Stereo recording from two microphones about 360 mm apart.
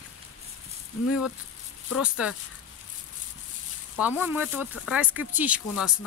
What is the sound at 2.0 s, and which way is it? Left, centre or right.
Speech, centre.